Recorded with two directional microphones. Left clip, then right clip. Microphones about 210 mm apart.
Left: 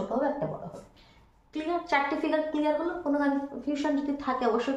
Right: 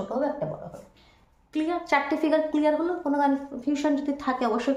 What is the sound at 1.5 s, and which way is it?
A woman's voice, 50° right (ahead or behind).